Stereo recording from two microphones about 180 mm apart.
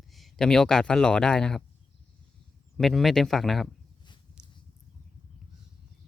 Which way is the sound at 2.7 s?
Centre (ahead or behind).